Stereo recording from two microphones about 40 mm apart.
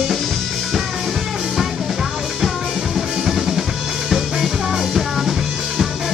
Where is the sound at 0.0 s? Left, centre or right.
Centre.